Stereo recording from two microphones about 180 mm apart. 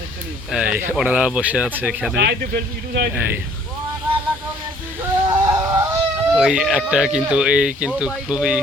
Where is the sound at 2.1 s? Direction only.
70° right (ahead or behind).